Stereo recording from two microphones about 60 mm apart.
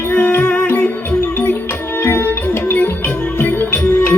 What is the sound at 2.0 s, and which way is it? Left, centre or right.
Music, left.